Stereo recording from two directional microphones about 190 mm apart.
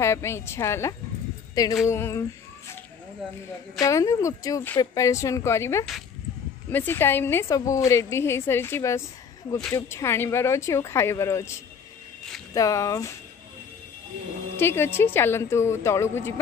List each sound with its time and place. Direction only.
0.0 s a woman's voice: 15° left (ahead or behind)
3.8 s a woman's voice: 15° left (ahead or behind)
12.5 s a woman's voice: 15° left (ahead or behind)
14.6 s a woman's voice: 10° left (ahead or behind)